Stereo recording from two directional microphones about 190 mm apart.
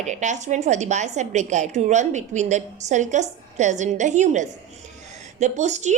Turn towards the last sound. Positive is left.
turn(degrees=-35)  # may be behind; listen again after turning